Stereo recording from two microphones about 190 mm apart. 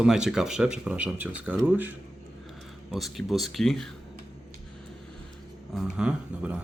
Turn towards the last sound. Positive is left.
turn(degrees=-5)  # may be behind; listen again after turning